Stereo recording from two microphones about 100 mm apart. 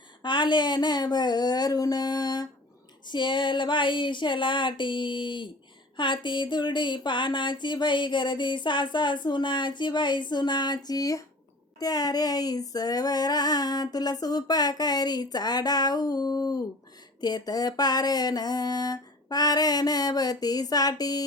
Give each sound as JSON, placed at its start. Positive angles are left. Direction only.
{"t": 0.2, "sound": "speech", "side_deg": 50}
{"t": 3.1, "sound": "speech", "side_deg": 50}
{"t": 11.8, "sound": "a sound", "side_deg": 40}